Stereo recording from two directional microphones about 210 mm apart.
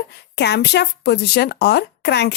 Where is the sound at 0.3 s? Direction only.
55° left (ahead or behind).